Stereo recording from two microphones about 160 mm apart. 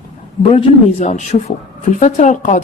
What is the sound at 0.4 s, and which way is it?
Speech, 40° left (ahead or behind).